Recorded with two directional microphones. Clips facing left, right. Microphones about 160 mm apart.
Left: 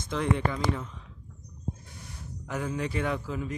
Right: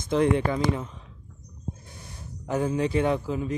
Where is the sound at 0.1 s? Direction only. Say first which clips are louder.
Right 6 dB; 20° right (ahead or behind).